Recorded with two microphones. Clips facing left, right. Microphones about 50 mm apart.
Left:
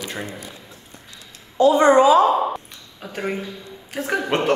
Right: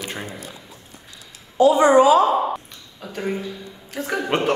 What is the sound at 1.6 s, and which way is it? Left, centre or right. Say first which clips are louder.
Speech: even; left.